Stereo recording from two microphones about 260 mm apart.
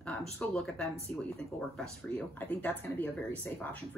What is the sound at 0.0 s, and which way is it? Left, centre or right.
Speech, centre.